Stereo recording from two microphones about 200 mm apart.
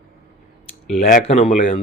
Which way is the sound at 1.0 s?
35° left (ahead or behind).